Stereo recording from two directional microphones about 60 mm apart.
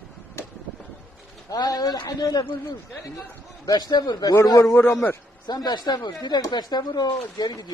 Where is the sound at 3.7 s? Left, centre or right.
Left.